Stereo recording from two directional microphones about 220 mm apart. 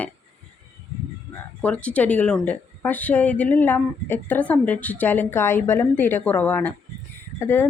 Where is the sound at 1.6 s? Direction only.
5° left (ahead or behind).